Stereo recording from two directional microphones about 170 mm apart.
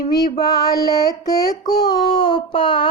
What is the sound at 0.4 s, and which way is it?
Child singing, 20° left (ahead or behind).